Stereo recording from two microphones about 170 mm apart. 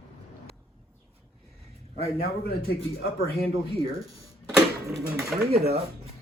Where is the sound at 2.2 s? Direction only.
65° left (ahead or behind).